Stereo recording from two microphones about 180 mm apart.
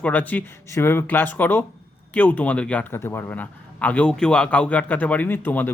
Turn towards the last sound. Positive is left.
turn(degrees=10)  # may be behind; listen again after turning